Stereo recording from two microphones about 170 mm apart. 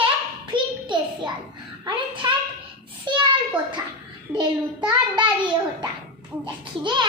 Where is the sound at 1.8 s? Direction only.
30° right (ahead or behind).